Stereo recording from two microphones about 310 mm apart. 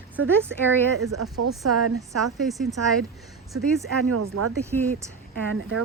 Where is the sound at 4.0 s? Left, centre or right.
Right.